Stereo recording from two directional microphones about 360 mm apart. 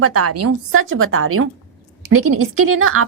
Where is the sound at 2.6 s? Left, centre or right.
Right.